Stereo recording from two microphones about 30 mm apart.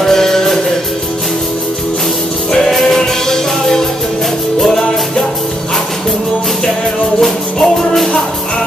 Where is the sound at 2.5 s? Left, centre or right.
Centre.